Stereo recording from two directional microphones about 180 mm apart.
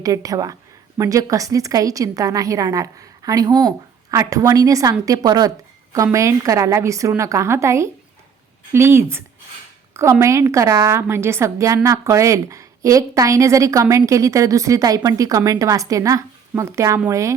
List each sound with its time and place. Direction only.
0.0 s a woman's voice: 20° right (ahead or behind)